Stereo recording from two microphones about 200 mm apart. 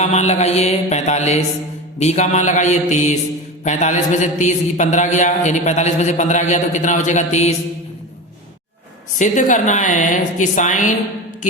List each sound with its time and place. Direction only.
0.0 s a man's voice: 35° left (ahead or behind)
9.1 s a man's voice: 40° left (ahead or behind)